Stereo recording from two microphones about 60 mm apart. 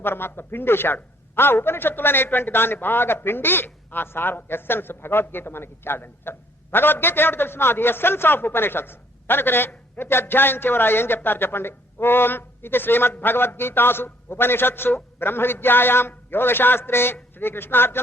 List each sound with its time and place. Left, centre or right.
0.0 s a man's voice: left